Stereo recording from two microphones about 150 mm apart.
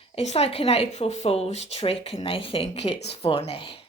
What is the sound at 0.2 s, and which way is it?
Speech, 45° left (ahead or behind).